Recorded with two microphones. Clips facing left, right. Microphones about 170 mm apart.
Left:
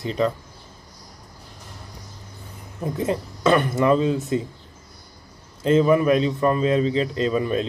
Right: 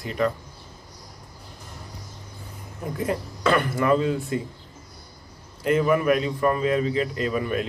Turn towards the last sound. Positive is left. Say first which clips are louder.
# left 3 dB
turn(degrees=25)  # may be behind; listen again after turning